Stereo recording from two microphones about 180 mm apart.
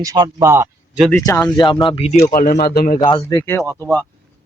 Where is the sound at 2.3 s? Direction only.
55° left (ahead or behind).